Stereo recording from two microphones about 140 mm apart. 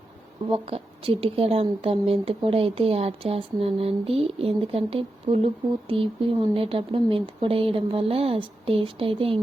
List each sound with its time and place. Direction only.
0.5 s speech: 40° right (ahead or behind)